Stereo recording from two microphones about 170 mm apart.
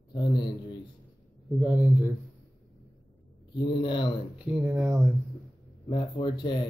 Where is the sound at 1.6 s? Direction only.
10° right (ahead or behind).